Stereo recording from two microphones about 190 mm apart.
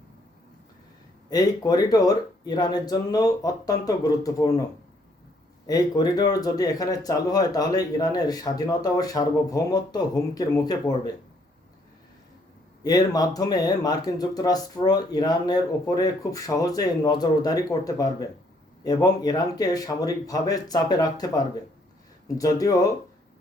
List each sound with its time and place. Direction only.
1.3 s speech: 20° left (ahead or behind)
5.6 s speech: 20° left (ahead or behind)
12.8 s speech: 20° left (ahead or behind)